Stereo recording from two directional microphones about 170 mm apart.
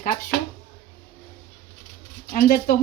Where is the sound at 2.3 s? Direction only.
60° left (ahead or behind).